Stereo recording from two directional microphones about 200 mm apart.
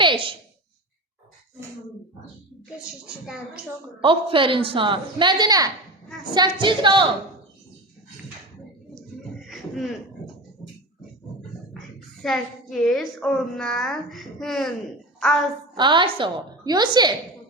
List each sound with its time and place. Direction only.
0.0 s a sound: 25° right (ahead or behind)
4.0 s a woman's voice: 25° right (ahead or behind)
9.4 s cough: centre (ahead or behind)
12.2 s a woman's voice: centre (ahead or behind)
15.7 s a woman's voice: 25° right (ahead or behind)